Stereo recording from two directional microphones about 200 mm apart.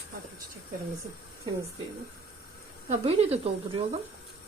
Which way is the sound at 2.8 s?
30° right (ahead or behind).